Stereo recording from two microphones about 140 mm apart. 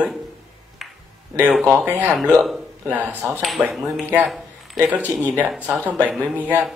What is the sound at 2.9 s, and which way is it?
Speech, 10° right (ahead or behind).